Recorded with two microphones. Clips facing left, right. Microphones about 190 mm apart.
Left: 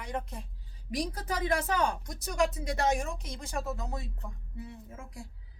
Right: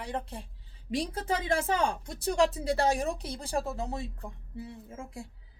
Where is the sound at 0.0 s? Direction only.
30° right (ahead or behind).